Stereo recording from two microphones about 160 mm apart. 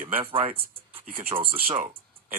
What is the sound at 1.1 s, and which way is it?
Speech, 60° right (ahead or behind).